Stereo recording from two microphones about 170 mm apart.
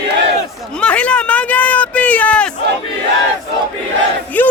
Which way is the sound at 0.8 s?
5° left (ahead or behind).